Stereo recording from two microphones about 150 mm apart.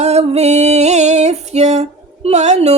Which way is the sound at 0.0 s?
45° right (ahead or behind).